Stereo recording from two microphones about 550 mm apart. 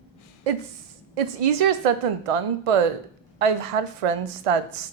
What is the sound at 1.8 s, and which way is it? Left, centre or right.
Speech, right.